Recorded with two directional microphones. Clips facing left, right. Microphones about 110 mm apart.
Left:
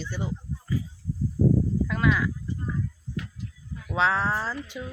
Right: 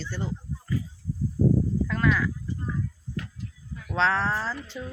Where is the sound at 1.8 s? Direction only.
10° left (ahead or behind).